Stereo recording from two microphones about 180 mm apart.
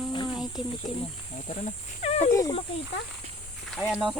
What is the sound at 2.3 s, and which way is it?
Speech, 20° left (ahead or behind).